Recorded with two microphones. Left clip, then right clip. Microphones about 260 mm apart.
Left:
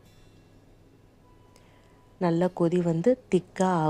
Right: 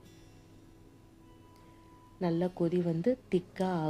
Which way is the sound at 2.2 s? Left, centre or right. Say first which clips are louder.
Left 7 dB; centre.